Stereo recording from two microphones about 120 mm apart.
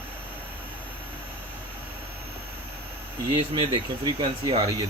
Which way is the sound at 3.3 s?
50° right (ahead or behind).